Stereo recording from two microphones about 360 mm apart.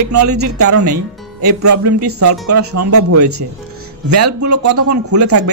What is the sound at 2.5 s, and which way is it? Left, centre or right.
Speech, right.